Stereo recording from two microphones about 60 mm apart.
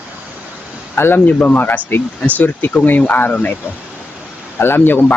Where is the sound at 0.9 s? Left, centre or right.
Left.